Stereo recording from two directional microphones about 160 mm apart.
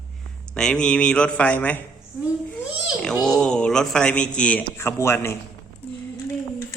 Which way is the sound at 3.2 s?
5° left (ahead or behind).